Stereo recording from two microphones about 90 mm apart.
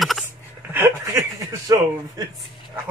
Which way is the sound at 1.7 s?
40° right (ahead or behind).